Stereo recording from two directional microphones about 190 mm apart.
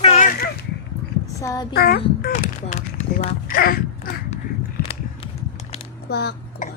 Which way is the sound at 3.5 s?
50° left (ahead or behind).